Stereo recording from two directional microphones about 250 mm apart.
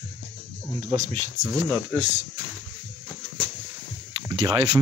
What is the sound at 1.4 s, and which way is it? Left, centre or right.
Speech, centre.